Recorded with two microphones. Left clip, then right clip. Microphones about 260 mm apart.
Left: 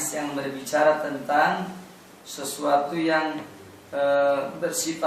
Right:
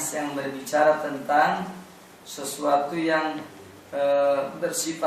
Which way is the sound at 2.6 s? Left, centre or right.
Centre.